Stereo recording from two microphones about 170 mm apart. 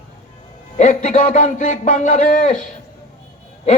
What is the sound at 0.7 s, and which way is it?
A man's voice, 45° left (ahead or behind).